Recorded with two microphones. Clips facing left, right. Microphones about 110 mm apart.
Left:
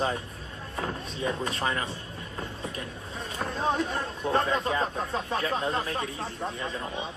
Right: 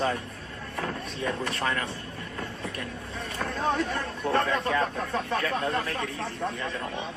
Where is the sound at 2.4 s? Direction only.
65° right (ahead or behind).